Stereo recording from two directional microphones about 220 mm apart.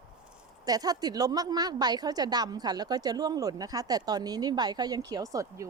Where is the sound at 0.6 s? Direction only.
15° right (ahead or behind).